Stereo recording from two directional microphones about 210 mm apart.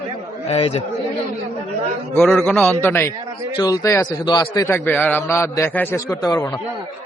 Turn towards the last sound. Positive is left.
turn(degrees=15)  # may be behind; listen again after turning